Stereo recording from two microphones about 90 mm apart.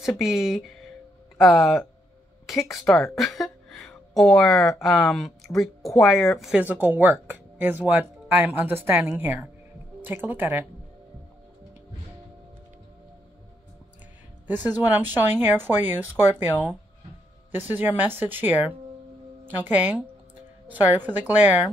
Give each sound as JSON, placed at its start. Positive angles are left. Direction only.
{"t": 0.2, "sound": "speech", "side_deg": -5}
{"t": 6.7, "sound": "speech", "side_deg": -20}
{"t": 14.6, "sound": "speech", "side_deg": -20}
{"t": 17.7, "sound": "speech", "side_deg": -25}